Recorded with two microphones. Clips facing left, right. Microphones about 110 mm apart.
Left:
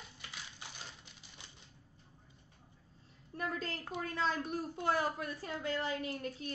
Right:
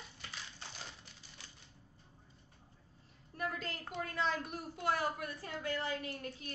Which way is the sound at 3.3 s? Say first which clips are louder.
Left 1 dB; 30° left (ahead or behind).